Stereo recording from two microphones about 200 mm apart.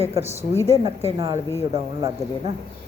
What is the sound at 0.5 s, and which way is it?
Speech, 15° left (ahead or behind).